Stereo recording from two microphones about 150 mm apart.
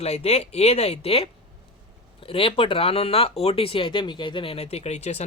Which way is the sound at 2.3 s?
35° left (ahead or behind).